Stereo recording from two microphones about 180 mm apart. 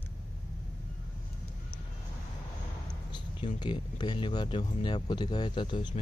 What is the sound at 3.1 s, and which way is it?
Speech, 25° left (ahead or behind).